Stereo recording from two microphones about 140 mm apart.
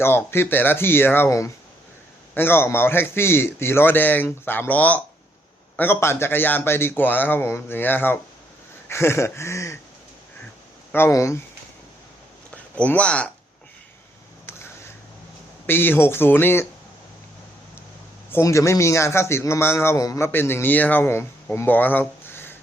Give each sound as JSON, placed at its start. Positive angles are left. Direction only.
{"t": 0.0, "sound": "a man's voice", "side_deg": 15}
{"t": 8.9, "sound": "a sound", "side_deg": 20}
{"t": 10.9, "sound": "a sound", "side_deg": 20}
{"t": 12.7, "sound": "a man's voice", "side_deg": 10}
{"t": 15.6, "sound": "a man's voice", "side_deg": 15}
{"t": 18.3, "sound": "a man's voice", "side_deg": 20}